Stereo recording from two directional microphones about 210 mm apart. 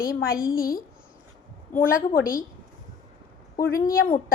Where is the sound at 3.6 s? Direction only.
45° left (ahead or behind).